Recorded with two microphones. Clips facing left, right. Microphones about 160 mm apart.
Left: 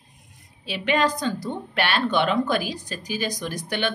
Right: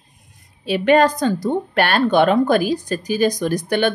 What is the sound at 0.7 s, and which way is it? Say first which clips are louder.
Speech: right 8 dB; 45° right (ahead or behind).